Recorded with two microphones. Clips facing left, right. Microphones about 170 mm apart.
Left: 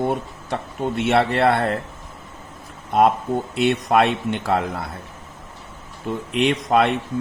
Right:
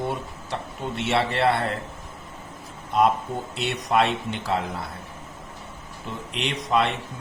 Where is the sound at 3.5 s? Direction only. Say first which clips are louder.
Left 6 dB; 55° left (ahead or behind).